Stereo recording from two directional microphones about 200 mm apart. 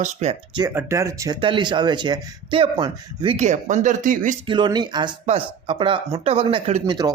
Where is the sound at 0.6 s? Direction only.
10° right (ahead or behind); by 4.3 s 40° right (ahead or behind).